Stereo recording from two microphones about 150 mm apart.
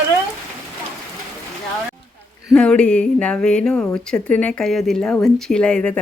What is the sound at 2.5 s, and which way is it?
A woman's voice, 5° left (ahead or behind).